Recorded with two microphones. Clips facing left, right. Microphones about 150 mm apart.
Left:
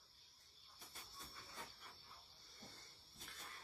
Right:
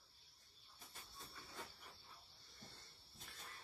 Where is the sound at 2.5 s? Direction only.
Centre (ahead or behind).